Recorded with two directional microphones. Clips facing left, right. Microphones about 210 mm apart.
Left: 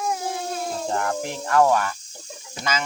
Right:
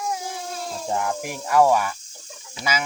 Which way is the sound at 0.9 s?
10° right (ahead or behind).